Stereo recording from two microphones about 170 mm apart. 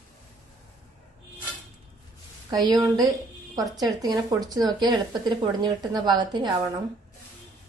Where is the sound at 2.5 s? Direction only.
25° right (ahead or behind).